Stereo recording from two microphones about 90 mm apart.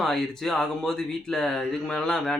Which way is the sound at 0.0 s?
5° left (ahead or behind).